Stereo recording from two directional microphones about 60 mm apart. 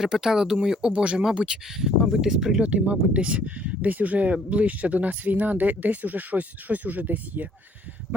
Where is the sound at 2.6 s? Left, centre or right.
Right.